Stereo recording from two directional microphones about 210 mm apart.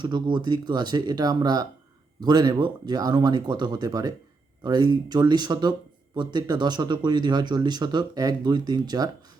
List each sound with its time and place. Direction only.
0.0 s speech: 20° right (ahead or behind)